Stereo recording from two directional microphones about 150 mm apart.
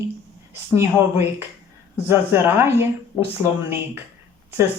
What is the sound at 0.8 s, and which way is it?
A woman's voice, 15° right (ahead or behind).